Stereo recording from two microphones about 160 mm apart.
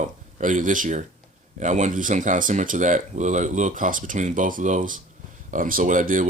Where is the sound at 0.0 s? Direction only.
50° right (ahead or behind).